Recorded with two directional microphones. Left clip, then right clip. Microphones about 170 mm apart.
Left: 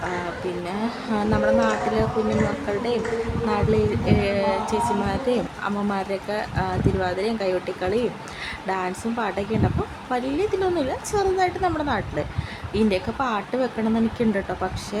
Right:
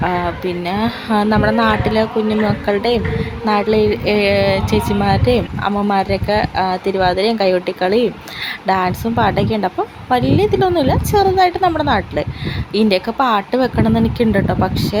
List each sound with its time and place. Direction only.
0.6 s a woman's voice: 30° right (ahead or behind)